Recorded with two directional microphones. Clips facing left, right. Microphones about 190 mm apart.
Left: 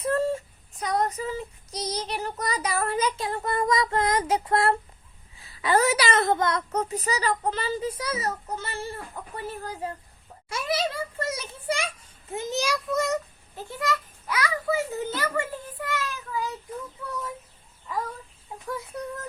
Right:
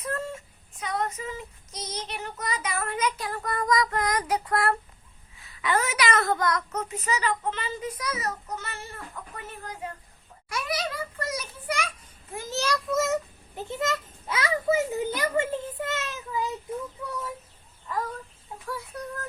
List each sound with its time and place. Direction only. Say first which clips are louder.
0.0 s child singing: left 8 dB; 30° left (ahead or behind)
5.4 s a woman's voice: left 4 dB; 35° left (ahead or behind)
10.5 s a sound: left 3 dB; 25° left (ahead or behind)
12.3 s a child's voice: left 1 dB; 20° left (ahead or behind)
12.9 s a child's voice: right 1 dB; 5° right (ahead or behind)
13.6 s a sound: even; 20° right (ahead or behind)
17.0 s child singing: right 1 dB; 15° right (ahead or behind)